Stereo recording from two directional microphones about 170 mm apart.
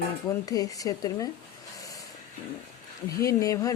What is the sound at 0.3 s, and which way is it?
Speech, 20° left (ahead or behind).